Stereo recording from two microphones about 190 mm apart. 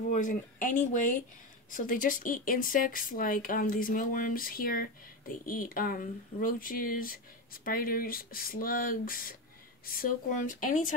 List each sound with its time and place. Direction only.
0.0 s speech: 45° left (ahead or behind)